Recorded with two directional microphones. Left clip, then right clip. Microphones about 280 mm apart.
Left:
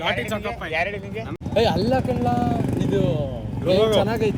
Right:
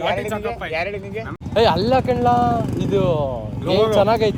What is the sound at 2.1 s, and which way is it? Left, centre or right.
Speech, centre.